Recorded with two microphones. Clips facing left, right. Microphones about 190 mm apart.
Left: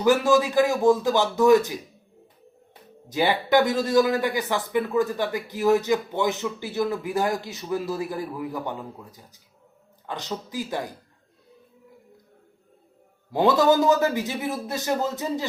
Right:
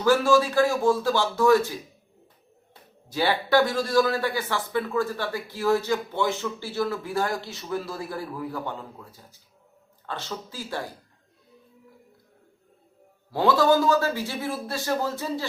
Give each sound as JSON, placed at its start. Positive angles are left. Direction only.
{"t": 0.0, "sound": "speech", "side_deg": 20}
{"t": 3.1, "sound": "speech", "side_deg": 20}
{"t": 13.3, "sound": "a man's voice", "side_deg": 20}